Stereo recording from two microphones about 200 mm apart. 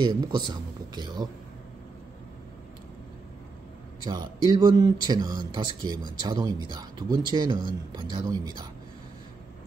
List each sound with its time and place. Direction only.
0.0 s speech: 20° right (ahead or behind)
4.0 s speech: 20° right (ahead or behind)